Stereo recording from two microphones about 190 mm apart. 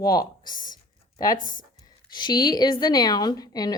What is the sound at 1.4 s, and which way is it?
Speech, 45° left (ahead or behind).